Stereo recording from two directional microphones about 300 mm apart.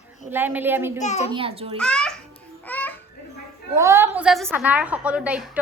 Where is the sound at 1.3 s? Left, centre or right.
Centre.